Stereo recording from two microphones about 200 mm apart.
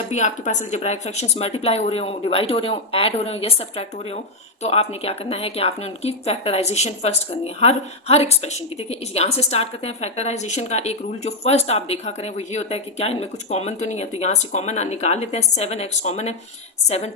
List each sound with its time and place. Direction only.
0.1 s speech: 35° left (ahead or behind)